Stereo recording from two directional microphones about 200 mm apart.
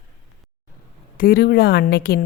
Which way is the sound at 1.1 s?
50° left (ahead or behind).